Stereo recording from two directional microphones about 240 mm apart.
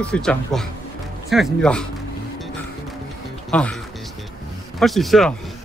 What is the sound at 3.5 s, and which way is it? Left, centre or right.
Speech, centre.